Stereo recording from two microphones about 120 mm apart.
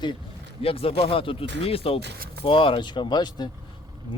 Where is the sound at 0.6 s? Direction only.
55° left (ahead or behind).